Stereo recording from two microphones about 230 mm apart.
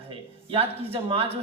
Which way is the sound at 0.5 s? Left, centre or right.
Right.